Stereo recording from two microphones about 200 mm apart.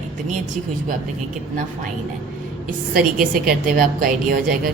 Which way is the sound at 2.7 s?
45° right (ahead or behind).